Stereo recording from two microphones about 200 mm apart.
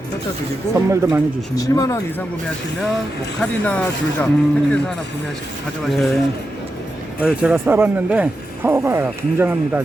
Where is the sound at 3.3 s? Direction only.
5° left (ahead or behind).